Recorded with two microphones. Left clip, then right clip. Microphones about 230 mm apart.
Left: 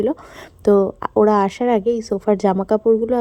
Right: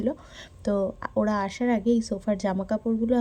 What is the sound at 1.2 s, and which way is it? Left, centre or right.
A woman's voice, left.